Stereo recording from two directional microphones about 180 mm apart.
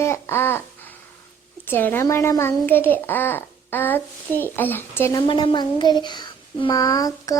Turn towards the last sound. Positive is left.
turn(degrees=20)  # may be behind; listen again after turning